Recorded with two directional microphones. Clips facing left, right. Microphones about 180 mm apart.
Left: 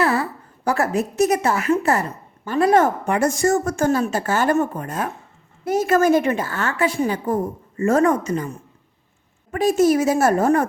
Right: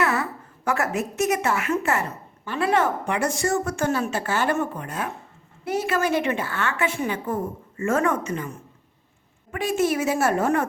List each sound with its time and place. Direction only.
0.0 s a woman's voice: 35° left (ahead or behind)